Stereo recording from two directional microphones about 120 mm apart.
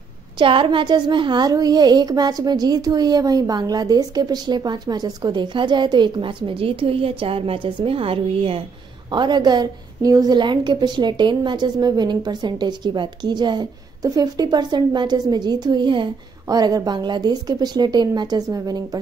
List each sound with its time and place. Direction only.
0.4 s a woman's voice: 45° right (ahead or behind)
9.1 s a woman's voice: 40° right (ahead or behind)